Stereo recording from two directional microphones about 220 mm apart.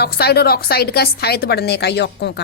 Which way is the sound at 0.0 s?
45° left (ahead or behind).